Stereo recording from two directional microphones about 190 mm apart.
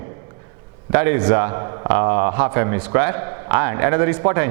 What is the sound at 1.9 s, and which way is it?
A man's voice, 15° right (ahead or behind).